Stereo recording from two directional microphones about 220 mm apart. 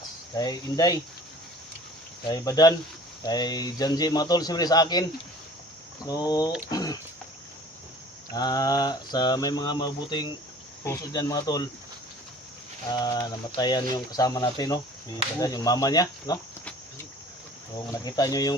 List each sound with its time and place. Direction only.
0.3 s speech: 15° left (ahead or behind)
2.3 s speech: 15° left (ahead or behind)
6.1 s speech: 15° left (ahead or behind)
8.3 s speech: 15° left (ahead or behind)
12.9 s speech: 20° left (ahead or behind)
17.9 s speech: 15° left (ahead or behind)